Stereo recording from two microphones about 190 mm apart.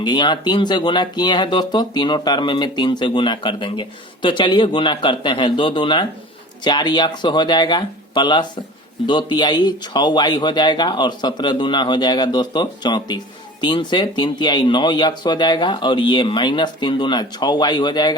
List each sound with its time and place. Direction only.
0.0 s speech: 25° left (ahead or behind)